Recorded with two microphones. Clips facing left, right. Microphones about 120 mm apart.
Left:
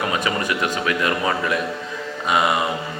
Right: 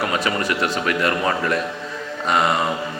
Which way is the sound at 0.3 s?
15° left (ahead or behind).